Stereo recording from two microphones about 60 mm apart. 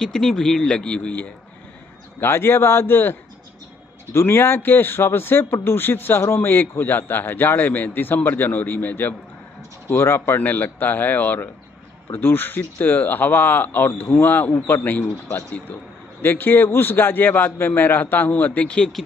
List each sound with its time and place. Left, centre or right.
0.0 s speech: centre
2.1 s a man's voice: left